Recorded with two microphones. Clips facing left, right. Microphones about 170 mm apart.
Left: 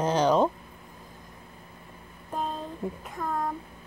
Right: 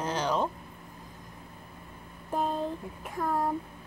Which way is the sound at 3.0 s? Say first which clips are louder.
Right 4 dB; 5° right (ahead or behind).